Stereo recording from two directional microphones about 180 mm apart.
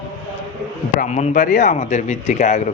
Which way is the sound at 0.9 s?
40° left (ahead or behind).